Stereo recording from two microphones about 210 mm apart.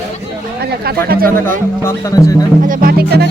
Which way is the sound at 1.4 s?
10° left (ahead or behind).